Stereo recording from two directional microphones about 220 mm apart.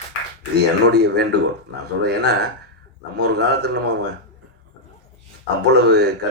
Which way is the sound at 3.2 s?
50° right (ahead or behind).